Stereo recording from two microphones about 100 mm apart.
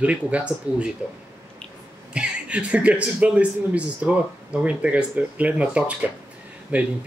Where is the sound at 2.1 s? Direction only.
10° right (ahead or behind).